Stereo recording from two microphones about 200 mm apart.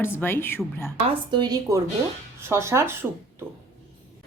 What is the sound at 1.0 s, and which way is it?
Speech, 25° right (ahead or behind).